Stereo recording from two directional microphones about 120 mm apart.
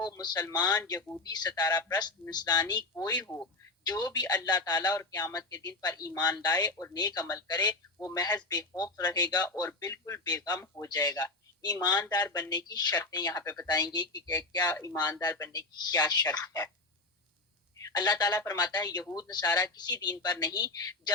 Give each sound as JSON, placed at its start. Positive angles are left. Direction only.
{"t": 0.0, "sound": "a man's voice", "side_deg": 30}
{"t": 3.2, "sound": "speech", "side_deg": 15}
{"t": 3.8, "sound": "a man's voice", "side_deg": 35}
{"t": 17.7, "sound": "a man's voice", "side_deg": 30}